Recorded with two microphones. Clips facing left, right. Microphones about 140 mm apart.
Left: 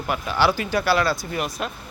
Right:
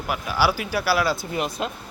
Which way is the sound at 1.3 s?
20° right (ahead or behind).